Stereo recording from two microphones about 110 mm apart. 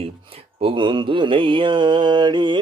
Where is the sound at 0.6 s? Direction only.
50° right (ahead or behind).